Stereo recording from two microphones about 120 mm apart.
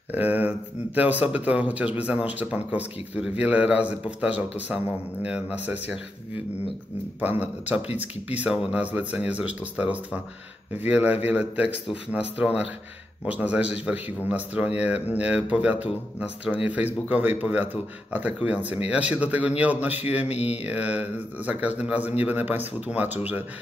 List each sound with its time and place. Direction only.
0.1 s speech: 15° right (ahead or behind)
7.2 s speech: 15° right (ahead or behind)
20.2 s speech: 65° left (ahead or behind)
20.6 s speech: 10° right (ahead or behind)